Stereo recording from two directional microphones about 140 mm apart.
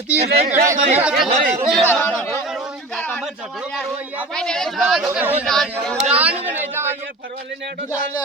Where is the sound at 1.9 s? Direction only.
10° left (ahead or behind).